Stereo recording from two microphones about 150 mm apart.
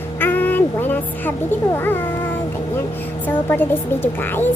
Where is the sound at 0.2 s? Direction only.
10° left (ahead or behind).